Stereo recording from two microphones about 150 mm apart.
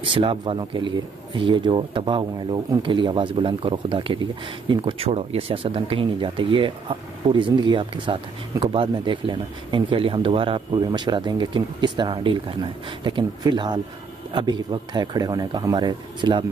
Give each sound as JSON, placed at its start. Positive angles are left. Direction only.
{"t": 0.0, "sound": "speech", "side_deg": -35}